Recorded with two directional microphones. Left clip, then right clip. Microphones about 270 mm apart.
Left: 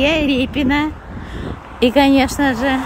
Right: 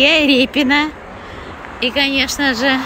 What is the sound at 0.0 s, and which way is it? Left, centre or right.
Speech, centre.